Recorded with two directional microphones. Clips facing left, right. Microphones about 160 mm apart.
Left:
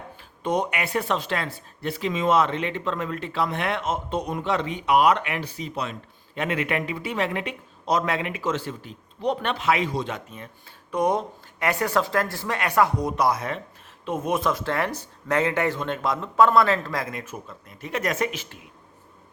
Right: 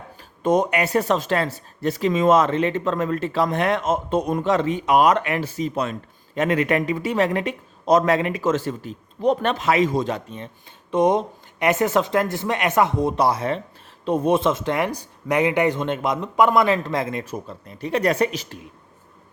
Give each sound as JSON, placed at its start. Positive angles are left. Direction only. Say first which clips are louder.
{"t": 0.2, "sound": "speech", "louder": "right 6 dB", "side_deg": -45}